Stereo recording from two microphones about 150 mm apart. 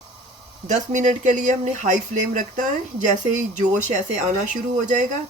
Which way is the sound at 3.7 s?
55° right (ahead or behind).